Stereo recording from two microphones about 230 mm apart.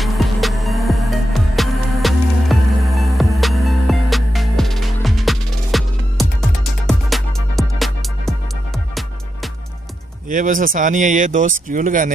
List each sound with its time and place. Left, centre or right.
0.0 s music: centre
10.2 s speech: right